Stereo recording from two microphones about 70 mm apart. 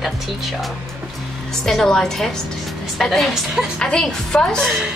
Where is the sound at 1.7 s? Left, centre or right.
Centre.